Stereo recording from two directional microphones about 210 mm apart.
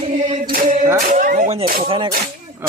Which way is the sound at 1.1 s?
40° right (ahead or behind).